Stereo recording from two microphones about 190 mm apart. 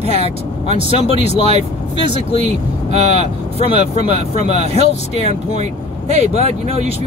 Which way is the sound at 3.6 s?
35° right (ahead or behind).